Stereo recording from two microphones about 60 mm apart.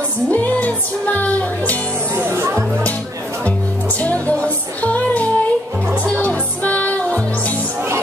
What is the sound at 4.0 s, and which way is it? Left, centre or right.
Music, left.